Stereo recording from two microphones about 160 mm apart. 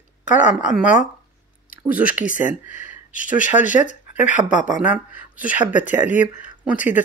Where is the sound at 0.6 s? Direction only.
5° right (ahead or behind).